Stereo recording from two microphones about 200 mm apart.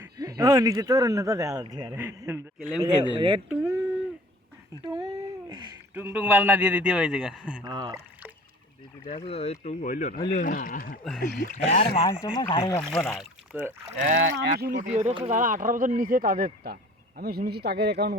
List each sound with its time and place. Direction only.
0.2 s a man's voice: 20° right (ahead or behind)
3.2 s speech: 25° right (ahead or behind)
3.5 s a sound: 10° right (ahead or behind)
5.5 s a sound: 20° right (ahead or behind)
5.9 s a man's voice: 10° right (ahead or behind)
7.6 s speech: 20° right (ahead or behind)
9.0 s speech: 30° left (ahead or behind)
12.0 s speech: 20° left (ahead or behind)
12.7 s speech: 10° left (ahead or behind)
13.5 s a man's voice: 10° right (ahead or behind)
14.0 s speech: 40° right (ahead or behind)